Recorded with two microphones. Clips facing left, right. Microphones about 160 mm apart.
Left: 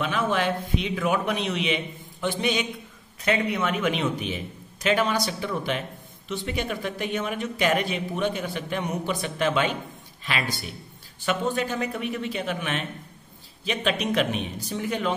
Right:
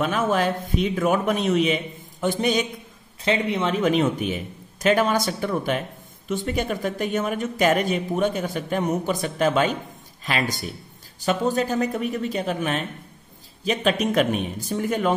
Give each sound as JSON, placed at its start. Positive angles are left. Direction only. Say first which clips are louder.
{"t": 0.0, "sound": "speech", "louder": "right 3 dB", "side_deg": -45}
{"t": 3.3, "sound": "speech", "louder": "right 2 dB", "side_deg": -25}